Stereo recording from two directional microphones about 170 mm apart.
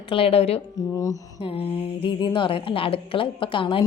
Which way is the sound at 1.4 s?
35° left (ahead or behind).